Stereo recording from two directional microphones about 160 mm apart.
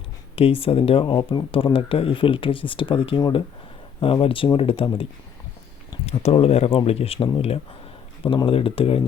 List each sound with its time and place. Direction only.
0.3 s speech: 35° left (ahead or behind)
6.1 s speech: 40° left (ahead or behind)